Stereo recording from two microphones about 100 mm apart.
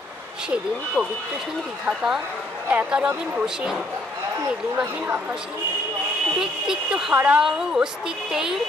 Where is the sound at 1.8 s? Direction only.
5° right (ahead or behind).